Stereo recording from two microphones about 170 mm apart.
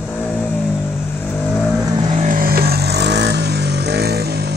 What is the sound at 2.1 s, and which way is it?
Vehicle, 50° right (ahead or behind).